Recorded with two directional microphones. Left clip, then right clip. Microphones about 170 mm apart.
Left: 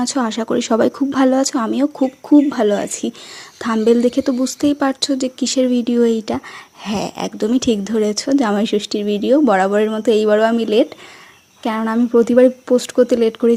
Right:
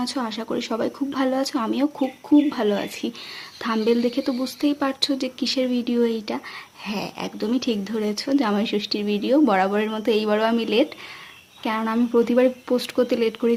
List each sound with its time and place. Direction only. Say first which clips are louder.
0.0 s a woman's voice: left 8 dB; 45° left (ahead or behind)